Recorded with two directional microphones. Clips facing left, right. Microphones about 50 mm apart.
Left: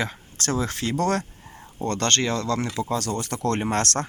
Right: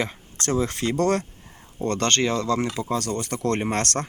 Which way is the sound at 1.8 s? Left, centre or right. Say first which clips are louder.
Right 1 dB; centre.